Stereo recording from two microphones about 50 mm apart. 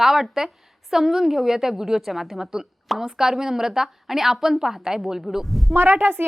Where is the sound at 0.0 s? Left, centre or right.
Centre.